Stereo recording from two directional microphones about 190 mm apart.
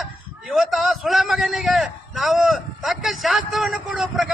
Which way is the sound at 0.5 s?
Centre (ahead or behind).